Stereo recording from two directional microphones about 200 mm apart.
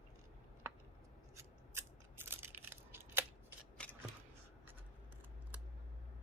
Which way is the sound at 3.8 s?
5° left (ahead or behind).